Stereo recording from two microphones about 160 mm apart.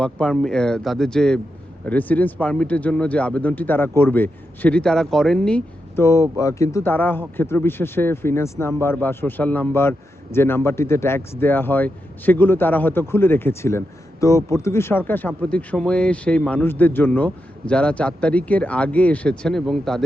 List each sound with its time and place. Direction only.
0.0 s speech: 5° left (ahead or behind)
6.0 s speech: 20° left (ahead or behind); by 20.1 s centre (ahead or behind)